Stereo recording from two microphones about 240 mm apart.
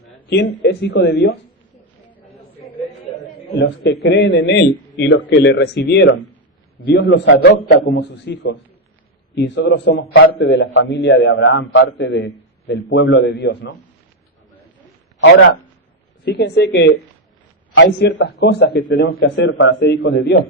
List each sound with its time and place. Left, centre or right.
0.3 s a man's voice: left
4.0 s a man's voice: left
16.2 s a man's voice: left